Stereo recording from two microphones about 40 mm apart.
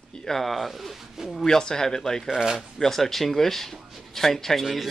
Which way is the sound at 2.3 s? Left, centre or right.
Centre.